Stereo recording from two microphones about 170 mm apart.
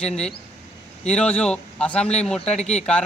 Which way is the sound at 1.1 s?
5° left (ahead or behind).